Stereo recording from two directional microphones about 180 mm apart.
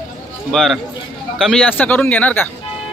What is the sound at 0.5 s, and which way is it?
Speech, centre (ahead or behind).